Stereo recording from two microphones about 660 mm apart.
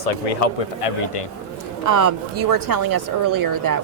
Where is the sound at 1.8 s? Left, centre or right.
Right.